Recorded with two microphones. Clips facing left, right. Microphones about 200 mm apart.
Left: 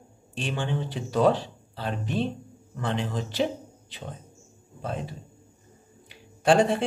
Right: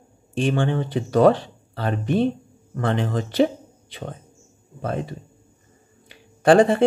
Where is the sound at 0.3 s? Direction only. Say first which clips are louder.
Right 8 dB; 50° right (ahead or behind).